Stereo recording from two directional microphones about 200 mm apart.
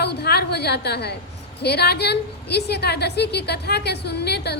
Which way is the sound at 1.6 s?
55° left (ahead or behind).